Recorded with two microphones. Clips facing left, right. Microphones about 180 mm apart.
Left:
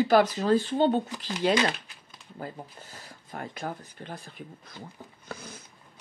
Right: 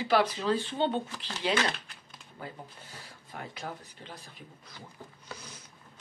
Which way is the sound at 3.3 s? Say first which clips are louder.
Left 5 dB; 50° left (ahead or behind).